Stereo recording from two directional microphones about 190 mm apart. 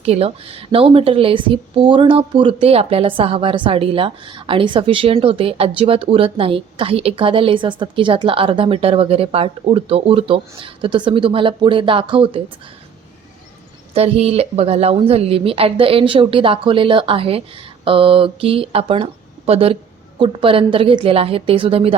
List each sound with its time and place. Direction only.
0.0 s speech: 30° right (ahead or behind)
13.9 s speech: 30° right (ahead or behind)